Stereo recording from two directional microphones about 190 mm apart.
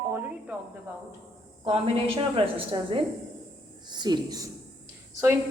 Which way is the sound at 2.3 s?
25° right (ahead or behind).